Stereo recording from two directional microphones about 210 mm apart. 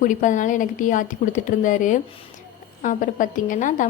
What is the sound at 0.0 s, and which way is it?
A woman's voice, 40° left (ahead or behind).